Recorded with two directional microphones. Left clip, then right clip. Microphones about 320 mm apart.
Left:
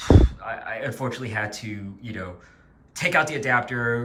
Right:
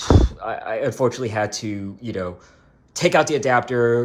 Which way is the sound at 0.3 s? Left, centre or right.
Centre.